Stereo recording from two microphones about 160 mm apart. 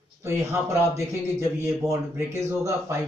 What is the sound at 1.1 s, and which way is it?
A man's voice, 15° right (ahead or behind).